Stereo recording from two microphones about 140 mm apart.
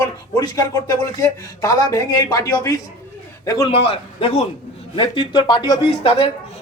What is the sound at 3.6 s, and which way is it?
A woman's voice, 40° left (ahead or behind).